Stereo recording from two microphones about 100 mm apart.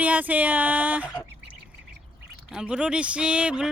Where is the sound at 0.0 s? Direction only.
15° right (ahead or behind).